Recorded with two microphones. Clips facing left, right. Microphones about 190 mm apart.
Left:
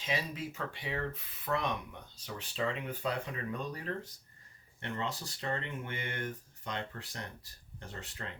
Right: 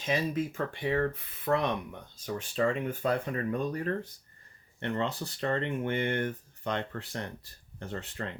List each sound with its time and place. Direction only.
0.0 s speech: 50° right (ahead or behind)